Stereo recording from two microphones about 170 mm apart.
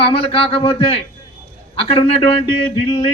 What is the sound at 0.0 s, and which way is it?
A man's voice, 35° left (ahead or behind).